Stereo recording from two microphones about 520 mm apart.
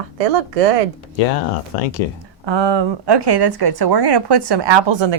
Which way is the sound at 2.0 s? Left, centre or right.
Left.